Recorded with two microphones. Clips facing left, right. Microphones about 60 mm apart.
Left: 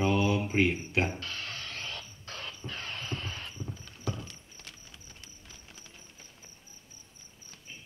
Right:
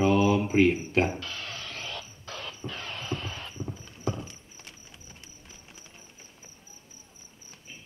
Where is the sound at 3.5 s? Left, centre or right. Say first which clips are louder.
Right 4 dB; centre.